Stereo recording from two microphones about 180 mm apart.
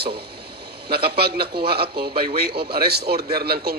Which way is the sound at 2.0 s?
35° right (ahead or behind).